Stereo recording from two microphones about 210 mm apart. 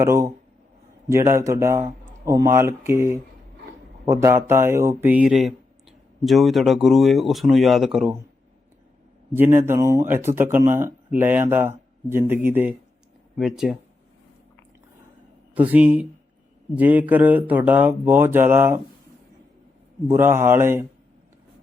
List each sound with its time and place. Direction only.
0.0 s speech: 15° right (ahead or behind)
9.3 s speech: 10° right (ahead or behind)
15.5 s speech: 5° right (ahead or behind)
20.1 s speech: 10° right (ahead or behind)